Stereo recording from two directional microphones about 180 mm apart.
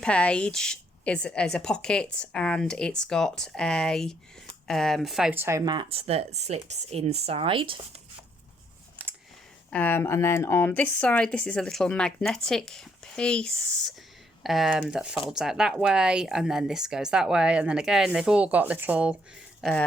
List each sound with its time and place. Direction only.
0.0 s a woman's voice: 5° left (ahead or behind); by 7.8 s 30° right (ahead or behind)
9.6 s a woman's voice: 10° left (ahead or behind); by 19.1 s 10° right (ahead or behind)